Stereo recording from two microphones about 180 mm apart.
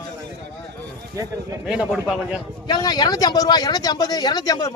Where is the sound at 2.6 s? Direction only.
20° left (ahead or behind).